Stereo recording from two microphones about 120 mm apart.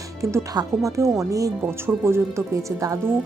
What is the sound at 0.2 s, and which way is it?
A woman's voice, 25° right (ahead or behind).